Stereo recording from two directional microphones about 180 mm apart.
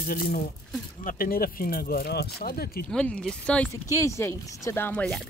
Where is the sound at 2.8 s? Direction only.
5° left (ahead or behind).